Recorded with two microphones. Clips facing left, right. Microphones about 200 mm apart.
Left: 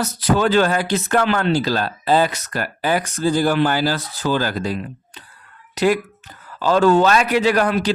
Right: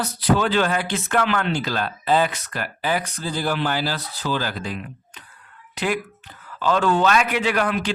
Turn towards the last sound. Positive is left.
turn(degrees=40)  # may be behind; listen again after turning